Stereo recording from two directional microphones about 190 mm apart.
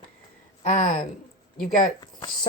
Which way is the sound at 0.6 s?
40° left (ahead or behind).